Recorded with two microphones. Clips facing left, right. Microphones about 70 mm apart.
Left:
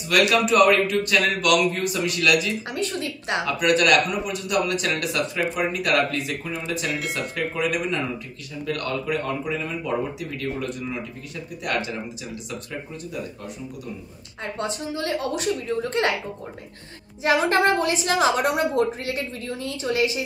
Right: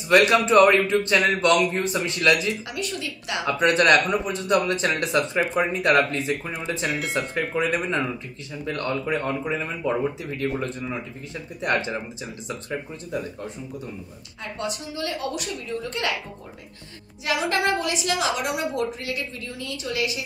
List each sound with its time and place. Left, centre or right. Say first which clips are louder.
0.1 s a man's voice: right 3 dB; right
2.7 s a woman's voice: left 3 dB; left
3.4 s speech: right 2 dB; right
6.9 s speech: right 1 dB; centre
7.5 s a man's voice: right 1 dB; right
14.6 s a woman's voice: left 2 dB; left
17.2 s a woman's voice: left 4 dB; left